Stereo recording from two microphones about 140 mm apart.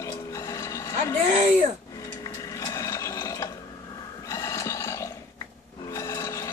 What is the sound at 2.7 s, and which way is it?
Water, 20° left (ahead or behind).